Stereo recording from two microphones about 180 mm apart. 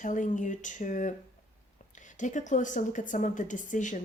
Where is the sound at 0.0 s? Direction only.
45° left (ahead or behind).